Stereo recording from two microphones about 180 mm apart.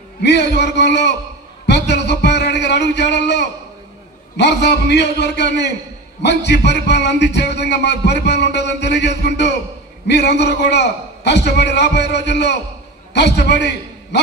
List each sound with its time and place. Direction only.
0.2 s speech: 70° left (ahead or behind)